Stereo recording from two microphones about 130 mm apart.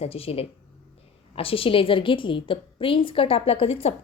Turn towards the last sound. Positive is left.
turn(degrees=50)  # may be behind; listen again after turning